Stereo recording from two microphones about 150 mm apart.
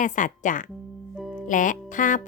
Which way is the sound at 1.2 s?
Centre (ahead or behind).